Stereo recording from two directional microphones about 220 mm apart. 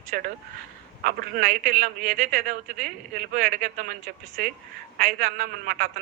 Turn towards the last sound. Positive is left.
turn(degrees=-40)  # may be behind; listen again after turning